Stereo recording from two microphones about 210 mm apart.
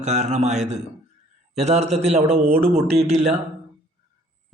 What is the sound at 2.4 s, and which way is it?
Speech, 45° right (ahead or behind).